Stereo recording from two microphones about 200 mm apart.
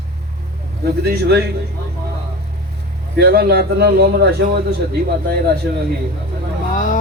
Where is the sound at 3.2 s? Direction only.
50° right (ahead or behind).